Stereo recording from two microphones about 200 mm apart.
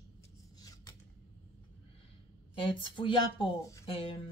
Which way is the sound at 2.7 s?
25° left (ahead or behind).